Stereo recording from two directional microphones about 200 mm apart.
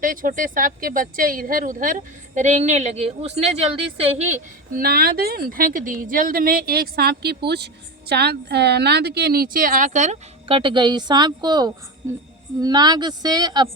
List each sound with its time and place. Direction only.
0.0 s a woman's voice: 45° right (ahead or behind)
4.8 s a woman's voice: 50° right (ahead or behind); by 13.7 s 20° right (ahead or behind)